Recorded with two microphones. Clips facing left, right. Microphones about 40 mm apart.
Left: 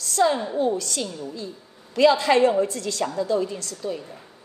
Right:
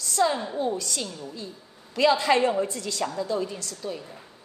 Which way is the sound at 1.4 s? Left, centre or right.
Left.